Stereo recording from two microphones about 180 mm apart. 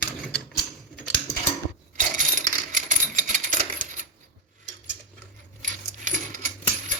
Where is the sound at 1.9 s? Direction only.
45° right (ahead or behind).